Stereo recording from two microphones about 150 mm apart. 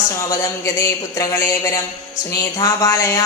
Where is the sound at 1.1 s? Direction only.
20° left (ahead or behind).